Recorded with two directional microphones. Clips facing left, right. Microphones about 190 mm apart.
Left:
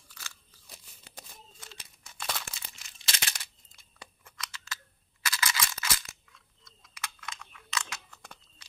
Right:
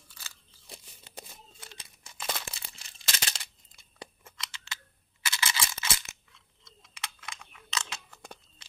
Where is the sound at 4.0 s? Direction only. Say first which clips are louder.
Right 2 dB; 25° right (ahead or behind).